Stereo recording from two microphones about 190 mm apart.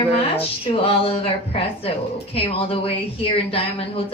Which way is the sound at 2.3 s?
30° left (ahead or behind).